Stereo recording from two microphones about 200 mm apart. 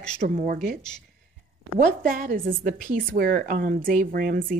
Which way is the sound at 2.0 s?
45° right (ahead or behind).